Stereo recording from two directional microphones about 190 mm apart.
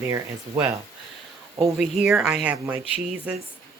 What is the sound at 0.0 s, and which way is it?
Speech, 15° right (ahead or behind).